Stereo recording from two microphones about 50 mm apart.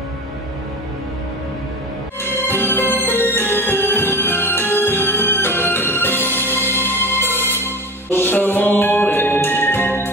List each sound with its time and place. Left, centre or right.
2.2 s music: left